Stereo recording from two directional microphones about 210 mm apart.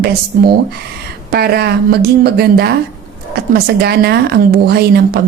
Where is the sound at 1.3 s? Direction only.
50° right (ahead or behind).